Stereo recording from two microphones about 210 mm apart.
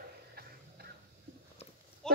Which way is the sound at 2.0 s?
5° left (ahead or behind).